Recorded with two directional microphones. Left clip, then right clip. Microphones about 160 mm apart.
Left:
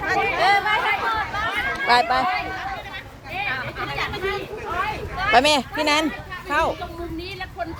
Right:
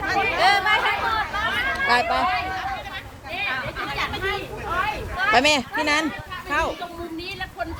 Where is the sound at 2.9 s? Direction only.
15° right (ahead or behind).